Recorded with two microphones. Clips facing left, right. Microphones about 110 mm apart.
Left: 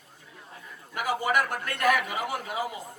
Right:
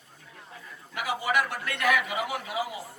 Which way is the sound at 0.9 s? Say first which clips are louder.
Left 1 dB; 45° left (ahead or behind).